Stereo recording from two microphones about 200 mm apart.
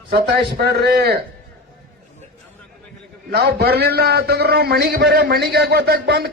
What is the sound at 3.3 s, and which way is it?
A man's voice, 55° right (ahead or behind).